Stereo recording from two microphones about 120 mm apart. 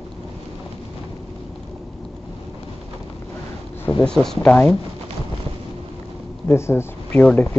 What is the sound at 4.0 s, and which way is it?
Speech, 5° left (ahead or behind).